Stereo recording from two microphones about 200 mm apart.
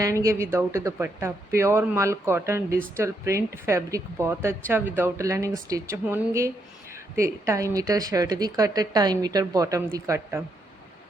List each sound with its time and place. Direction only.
0.0 s speech: 15° right (ahead or behind)